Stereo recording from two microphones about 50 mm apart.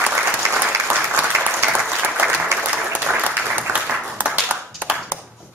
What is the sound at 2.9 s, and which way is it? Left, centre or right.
Applause, right.